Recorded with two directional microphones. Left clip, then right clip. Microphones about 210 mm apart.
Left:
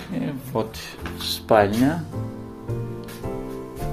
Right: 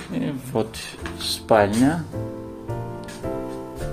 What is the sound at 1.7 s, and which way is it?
Speech, 20° right (ahead or behind).